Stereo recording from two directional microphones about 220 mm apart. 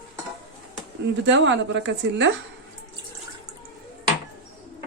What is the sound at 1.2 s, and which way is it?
A man's voice, 55° right (ahead or behind).